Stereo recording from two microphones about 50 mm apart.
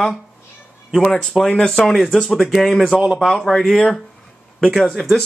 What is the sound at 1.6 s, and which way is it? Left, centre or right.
A man's voice, centre.